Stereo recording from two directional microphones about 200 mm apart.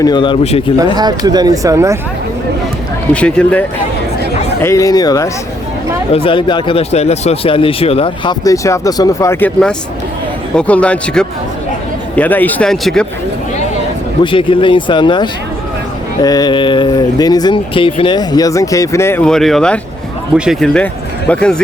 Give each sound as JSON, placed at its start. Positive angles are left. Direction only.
{"t": 0.0, "sound": "speech", "side_deg": 25}
{"t": 0.9, "sound": "speech", "side_deg": -20}
{"t": 3.1, "sound": "speech", "side_deg": 5}
{"t": 4.6, "sound": "a man's voice", "side_deg": 15}
{"t": 14.3, "sound": "speech", "side_deg": 25}